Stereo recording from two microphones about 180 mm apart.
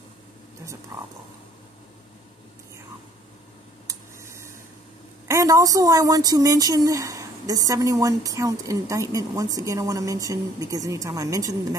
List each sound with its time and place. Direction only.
0.9 s speech: 20° right (ahead or behind)
3.8 s a sound: 15° right (ahead or behind)
5.3 s speech: 20° right (ahead or behind)